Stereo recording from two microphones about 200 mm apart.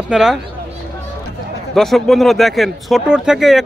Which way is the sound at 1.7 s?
Centre (ahead or behind).